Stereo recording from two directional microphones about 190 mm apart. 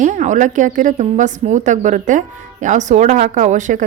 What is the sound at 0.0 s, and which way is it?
A woman's voice, 40° right (ahead or behind).